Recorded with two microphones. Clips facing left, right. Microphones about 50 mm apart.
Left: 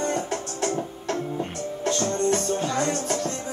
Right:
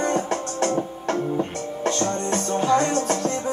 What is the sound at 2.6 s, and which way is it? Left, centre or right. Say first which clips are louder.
Music: right 5 dB; centre.